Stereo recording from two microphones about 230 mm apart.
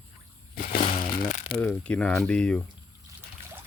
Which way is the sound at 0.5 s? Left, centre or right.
Left.